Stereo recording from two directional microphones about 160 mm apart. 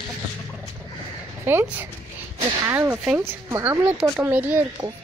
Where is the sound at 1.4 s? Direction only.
15° right (ahead or behind).